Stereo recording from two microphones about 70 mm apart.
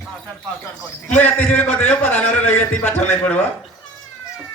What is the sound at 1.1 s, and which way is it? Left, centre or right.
A man's voice, left.